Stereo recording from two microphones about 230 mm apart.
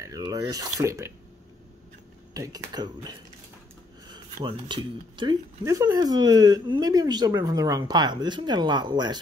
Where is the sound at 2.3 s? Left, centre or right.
Centre.